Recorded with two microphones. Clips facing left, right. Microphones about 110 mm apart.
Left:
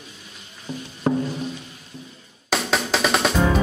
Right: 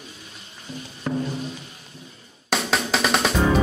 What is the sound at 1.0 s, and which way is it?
Music, 35° left (ahead or behind).